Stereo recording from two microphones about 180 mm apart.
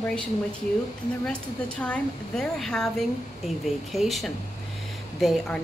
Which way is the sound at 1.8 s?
5° left (ahead or behind).